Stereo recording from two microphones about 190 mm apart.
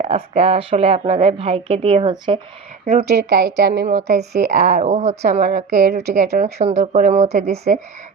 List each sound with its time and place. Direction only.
0.0 s speech: 30° right (ahead or behind)
3.0 s speech: 60° right (ahead or behind)
4.5 s speech: 40° right (ahead or behind)
6.1 s speech: 60° right (ahead or behind)
6.4 s speech: 35° right (ahead or behind)